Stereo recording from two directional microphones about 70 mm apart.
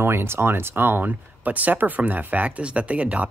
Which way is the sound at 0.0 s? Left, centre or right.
Right.